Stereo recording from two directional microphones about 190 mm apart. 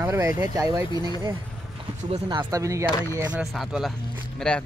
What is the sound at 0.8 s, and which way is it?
Speech, 20° left (ahead or behind).